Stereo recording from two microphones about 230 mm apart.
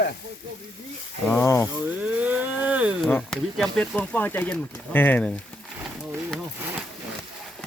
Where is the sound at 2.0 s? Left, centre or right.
Centre.